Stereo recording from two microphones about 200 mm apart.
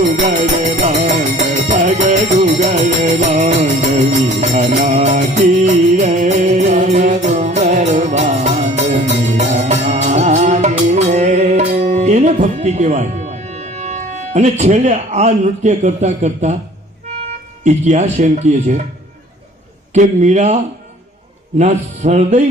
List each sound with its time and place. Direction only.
0.2 s music: 35° right (ahead or behind)
17.2 s speech: 35° right (ahead or behind)
19.9 s music: 35° right (ahead or behind)
21.6 s music: 35° right (ahead or behind)